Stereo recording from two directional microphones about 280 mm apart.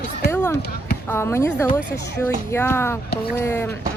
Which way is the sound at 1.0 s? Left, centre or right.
Centre.